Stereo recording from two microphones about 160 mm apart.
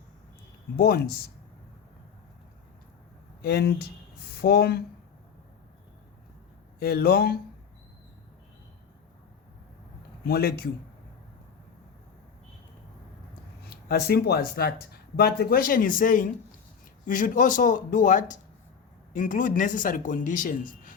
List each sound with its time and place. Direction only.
0.8 s speech: 75° left (ahead or behind)
3.4 s speech: 85° left
4.4 s speech: 75° left (ahead or behind)
6.7 s speech: 70° left (ahead or behind)
10.2 s speech: 75° left (ahead or behind)
13.7 s speech: 75° left (ahead or behind); by 20.9 s 55° left (ahead or behind)